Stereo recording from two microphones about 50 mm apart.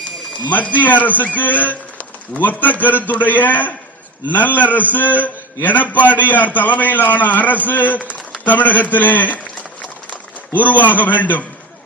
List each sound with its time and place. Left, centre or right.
0.5 s a man's voice: left